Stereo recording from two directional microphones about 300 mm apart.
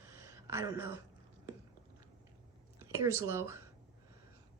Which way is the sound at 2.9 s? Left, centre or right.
Centre.